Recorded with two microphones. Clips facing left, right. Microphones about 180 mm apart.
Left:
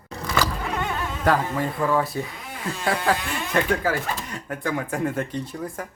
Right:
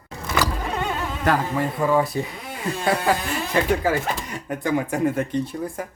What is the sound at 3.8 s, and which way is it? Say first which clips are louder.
Speech: right 3 dB; 20° right (ahead or behind).